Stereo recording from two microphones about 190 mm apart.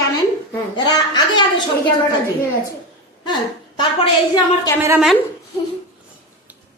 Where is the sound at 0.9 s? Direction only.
20° left (ahead or behind).